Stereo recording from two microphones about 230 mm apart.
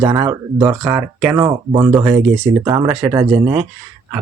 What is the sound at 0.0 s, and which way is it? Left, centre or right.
Speech, centre.